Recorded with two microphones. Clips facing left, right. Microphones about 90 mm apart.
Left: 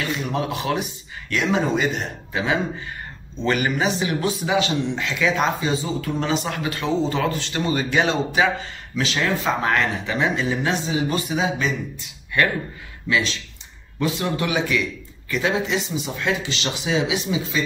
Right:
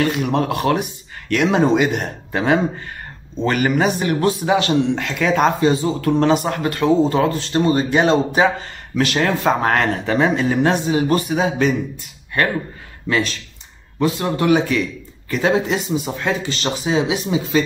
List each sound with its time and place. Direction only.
0.0 s a man's voice: 55° right (ahead or behind)
7.2 s a man's voice: 40° right (ahead or behind)
8.9 s a man's voice: 50° right (ahead or behind)
13.1 s a man's voice: 50° right (ahead or behind)